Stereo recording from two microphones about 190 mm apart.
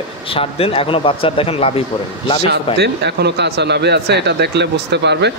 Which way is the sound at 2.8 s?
60° right (ahead or behind).